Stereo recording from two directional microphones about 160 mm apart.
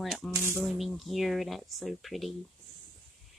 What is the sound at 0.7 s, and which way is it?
Speech, centre (ahead or behind).